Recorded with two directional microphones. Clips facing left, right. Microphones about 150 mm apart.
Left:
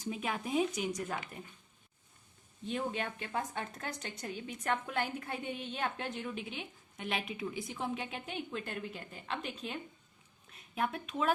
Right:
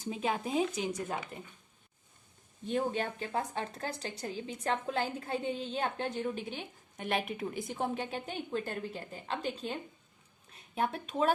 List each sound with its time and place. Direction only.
0.0 s speech: 30° right (ahead or behind)
2.6 s speech: 35° right (ahead or behind)